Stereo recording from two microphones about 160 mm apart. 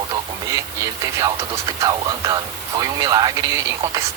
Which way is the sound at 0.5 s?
20° right (ahead or behind).